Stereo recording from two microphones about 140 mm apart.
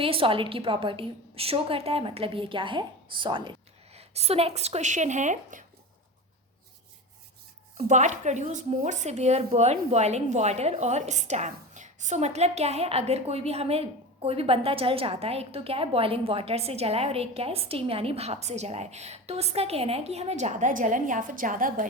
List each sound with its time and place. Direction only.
0.0 s a woman's voice: 40° right (ahead or behind)
3.9 s speech: 50° right (ahead or behind); by 5.6 s 65° right (ahead or behind)
7.8 s speech: 60° right (ahead or behind)